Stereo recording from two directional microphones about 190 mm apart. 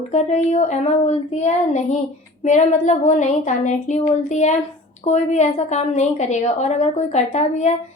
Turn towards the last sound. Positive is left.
turn(degrees=35)  # may be behind; listen again after turning